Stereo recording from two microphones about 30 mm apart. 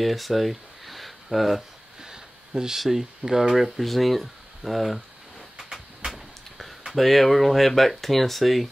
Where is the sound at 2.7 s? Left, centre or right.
Centre.